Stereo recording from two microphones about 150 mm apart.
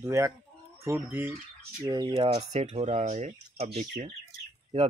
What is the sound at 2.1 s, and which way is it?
Speech, 45° right (ahead or behind).